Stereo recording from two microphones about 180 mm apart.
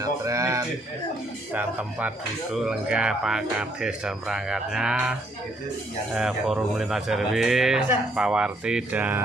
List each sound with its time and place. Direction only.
0.0 s a sound: 15° right (ahead or behind)
1.5 s speech: 10° right (ahead or behind)
6.1 s speech: centre (ahead or behind)